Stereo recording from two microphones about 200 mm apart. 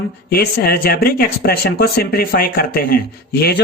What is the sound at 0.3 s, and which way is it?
Speech, 50° left (ahead or behind).